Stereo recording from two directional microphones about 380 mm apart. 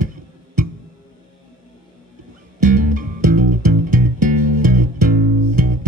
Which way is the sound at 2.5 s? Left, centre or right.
Right.